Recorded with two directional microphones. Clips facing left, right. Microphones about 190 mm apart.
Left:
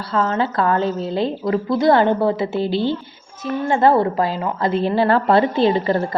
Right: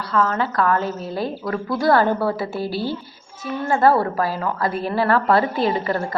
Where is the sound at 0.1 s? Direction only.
25° left (ahead or behind).